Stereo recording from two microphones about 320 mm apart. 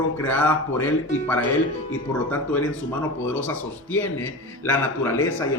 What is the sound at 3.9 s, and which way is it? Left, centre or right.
Speech, left.